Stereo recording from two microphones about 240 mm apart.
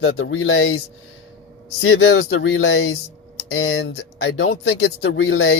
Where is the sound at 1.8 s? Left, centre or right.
Left.